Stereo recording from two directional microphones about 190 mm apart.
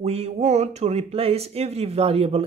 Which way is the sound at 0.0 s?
35° right (ahead or behind).